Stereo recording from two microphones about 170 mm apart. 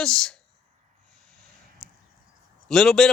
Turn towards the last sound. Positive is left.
turn(degrees=0)  # may be behind; listen again after turning